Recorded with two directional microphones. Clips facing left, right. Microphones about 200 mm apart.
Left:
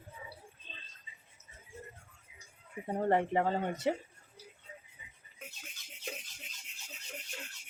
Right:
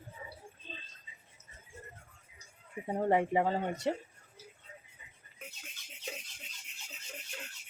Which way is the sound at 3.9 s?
5° left (ahead or behind).